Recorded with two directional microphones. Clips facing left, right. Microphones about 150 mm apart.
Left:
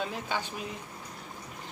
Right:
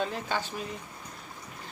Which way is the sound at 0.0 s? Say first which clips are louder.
Right 2 dB; 10° left (ahead or behind).